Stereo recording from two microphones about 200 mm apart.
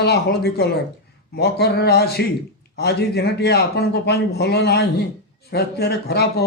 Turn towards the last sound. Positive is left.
turn(degrees=55)  # may be behind; listen again after turning